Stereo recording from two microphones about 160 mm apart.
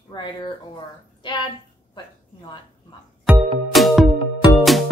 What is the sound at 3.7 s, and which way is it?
Music, centre (ahead or behind).